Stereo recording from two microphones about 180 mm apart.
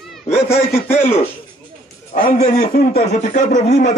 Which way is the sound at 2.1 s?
40° left (ahead or behind).